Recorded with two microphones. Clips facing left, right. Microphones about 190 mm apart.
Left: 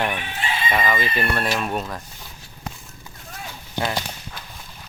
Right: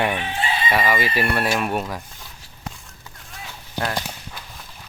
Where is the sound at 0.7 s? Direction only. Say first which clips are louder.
Right 2 dB; 10° right (ahead or behind).